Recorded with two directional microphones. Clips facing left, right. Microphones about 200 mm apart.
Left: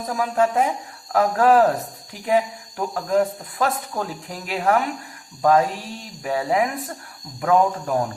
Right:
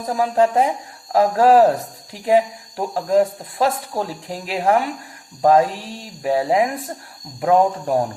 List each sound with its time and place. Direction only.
0.1 s speech: 35° right (ahead or behind)